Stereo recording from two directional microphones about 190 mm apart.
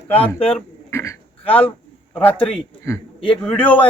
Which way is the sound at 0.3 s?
30° left (ahead or behind).